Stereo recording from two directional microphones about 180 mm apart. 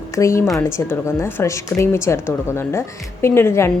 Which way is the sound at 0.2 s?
15° left (ahead or behind).